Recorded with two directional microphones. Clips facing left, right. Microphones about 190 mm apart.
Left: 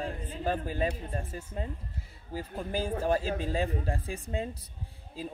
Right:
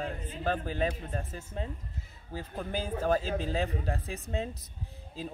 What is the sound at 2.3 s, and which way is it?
A man's voice, 5° left (ahead or behind).